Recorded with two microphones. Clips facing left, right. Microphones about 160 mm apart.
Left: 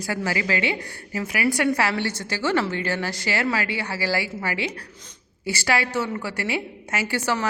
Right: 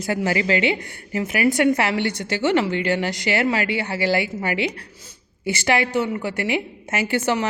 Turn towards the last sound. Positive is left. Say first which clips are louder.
# right 3 dB
turn(degrees=-20)  # may be behind; listen again after turning